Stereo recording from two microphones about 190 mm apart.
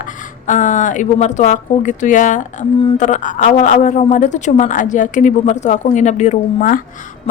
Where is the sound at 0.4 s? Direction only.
40° left (ahead or behind).